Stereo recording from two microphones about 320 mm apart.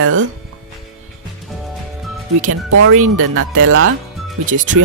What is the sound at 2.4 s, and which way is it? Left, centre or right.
Speech, right.